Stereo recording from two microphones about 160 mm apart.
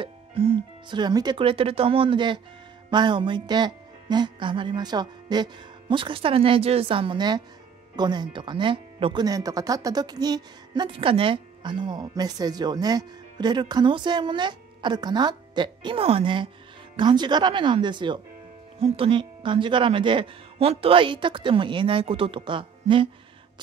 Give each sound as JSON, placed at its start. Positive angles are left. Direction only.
{"t": 0.0, "sound": "speech", "side_deg": -35}